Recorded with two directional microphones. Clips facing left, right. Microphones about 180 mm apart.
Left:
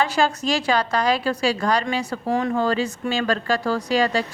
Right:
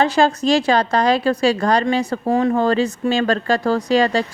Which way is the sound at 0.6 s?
45° right (ahead or behind).